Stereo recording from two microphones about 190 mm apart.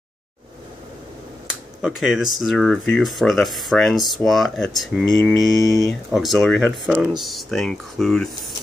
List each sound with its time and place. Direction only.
1.8 s speech: centre (ahead or behind)
5.6 s speech: 15° left (ahead or behind)
5.9 s speech: centre (ahead or behind)